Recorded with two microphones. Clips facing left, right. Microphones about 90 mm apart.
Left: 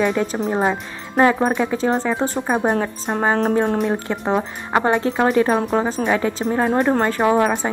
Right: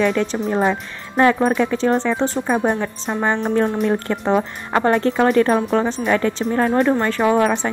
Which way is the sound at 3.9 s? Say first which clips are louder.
Right 2 dB; 10° left (ahead or behind).